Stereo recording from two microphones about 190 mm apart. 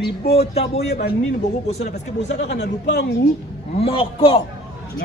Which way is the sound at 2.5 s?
65° left (ahead or behind).